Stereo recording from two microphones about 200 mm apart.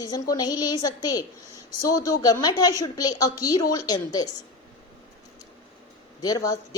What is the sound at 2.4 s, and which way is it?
A woman's voice, 20° left (ahead or behind).